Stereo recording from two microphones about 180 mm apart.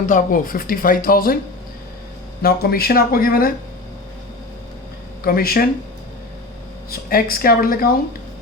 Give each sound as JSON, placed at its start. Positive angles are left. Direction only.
{"t": 0.0, "sound": "speech", "side_deg": 45}
{"t": 2.4, "sound": "speech", "side_deg": 60}
{"t": 5.2, "sound": "speech", "side_deg": 55}
{"t": 6.9, "sound": "speech", "side_deg": 55}